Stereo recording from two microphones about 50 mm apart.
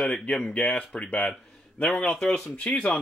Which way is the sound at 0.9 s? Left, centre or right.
Left.